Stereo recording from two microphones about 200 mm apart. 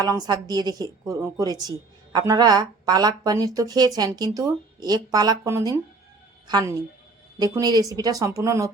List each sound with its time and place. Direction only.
0.0 s a woman's voice: 20° right (ahead or behind)